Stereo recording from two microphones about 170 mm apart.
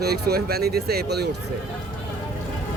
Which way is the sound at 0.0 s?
70° right (ahead or behind).